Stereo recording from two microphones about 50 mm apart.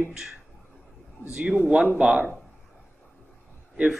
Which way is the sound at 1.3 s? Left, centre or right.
Centre.